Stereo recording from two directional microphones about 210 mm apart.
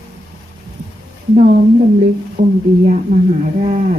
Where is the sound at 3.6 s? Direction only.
35° right (ahead or behind).